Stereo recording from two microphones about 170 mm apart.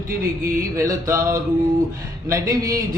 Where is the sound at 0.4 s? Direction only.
15° right (ahead or behind).